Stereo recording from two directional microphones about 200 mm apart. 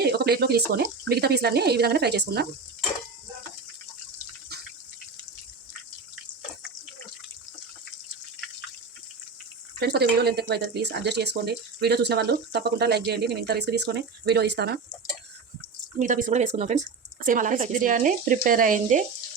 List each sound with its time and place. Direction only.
0.0 s speech: 55° right (ahead or behind)
9.8 s speech: 55° right (ahead or behind)
16.0 s speech: 40° right (ahead or behind)